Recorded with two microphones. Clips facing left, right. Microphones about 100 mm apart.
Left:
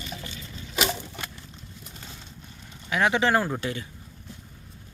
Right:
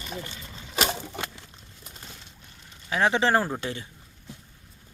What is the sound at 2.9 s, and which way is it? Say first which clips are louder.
Speech: even; 30° right (ahead or behind).